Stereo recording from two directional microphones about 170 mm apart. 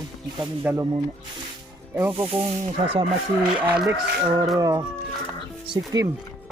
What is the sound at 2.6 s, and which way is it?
Speech, 35° right (ahead or behind).